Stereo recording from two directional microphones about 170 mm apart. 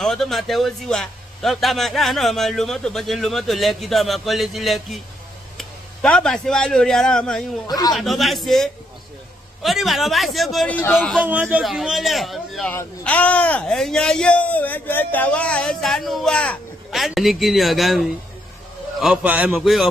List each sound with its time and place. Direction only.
0.0 s a man's voice: centre (ahead or behind)
7.6 s a man's voice: 20° left (ahead or behind)
7.9 s speech: centre (ahead or behind)